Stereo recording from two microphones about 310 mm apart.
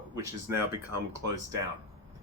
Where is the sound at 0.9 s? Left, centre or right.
Right.